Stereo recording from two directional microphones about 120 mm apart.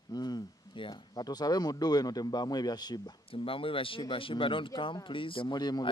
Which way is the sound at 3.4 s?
50° left (ahead or behind).